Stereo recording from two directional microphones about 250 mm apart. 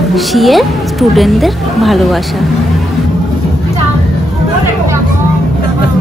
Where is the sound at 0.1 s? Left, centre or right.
Centre.